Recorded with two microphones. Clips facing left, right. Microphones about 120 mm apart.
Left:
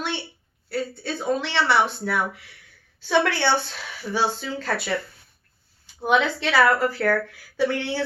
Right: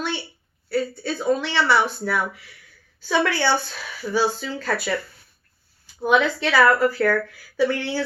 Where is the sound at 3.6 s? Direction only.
20° left (ahead or behind).